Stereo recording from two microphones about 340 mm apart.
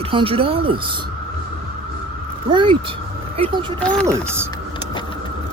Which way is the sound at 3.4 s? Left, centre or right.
Centre.